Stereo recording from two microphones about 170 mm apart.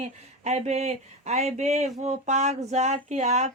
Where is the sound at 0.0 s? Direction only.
40° right (ahead or behind).